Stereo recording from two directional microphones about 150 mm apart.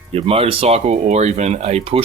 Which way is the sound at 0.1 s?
40° right (ahead or behind).